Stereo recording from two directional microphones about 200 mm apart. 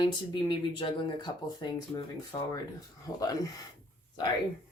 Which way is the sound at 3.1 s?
20° left (ahead or behind).